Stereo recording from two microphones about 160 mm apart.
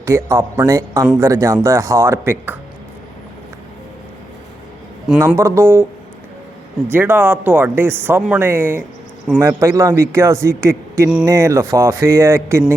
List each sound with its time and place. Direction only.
0.0 s a man's voice: 20° right (ahead or behind)
5.2 s speech: 15° right (ahead or behind)
6.9 s speech: 15° right (ahead or behind)